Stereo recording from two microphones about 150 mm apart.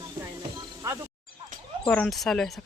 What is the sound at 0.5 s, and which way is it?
Snake, 20° right (ahead or behind).